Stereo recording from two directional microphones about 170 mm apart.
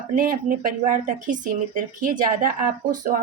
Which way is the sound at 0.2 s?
55° right (ahead or behind).